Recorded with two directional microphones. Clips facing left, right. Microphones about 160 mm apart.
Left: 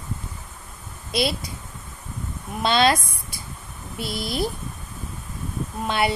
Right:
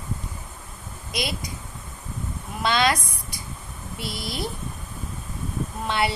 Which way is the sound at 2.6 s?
25° left (ahead or behind).